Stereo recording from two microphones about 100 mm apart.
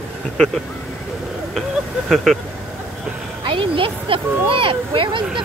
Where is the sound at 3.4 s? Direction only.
60° right (ahead or behind).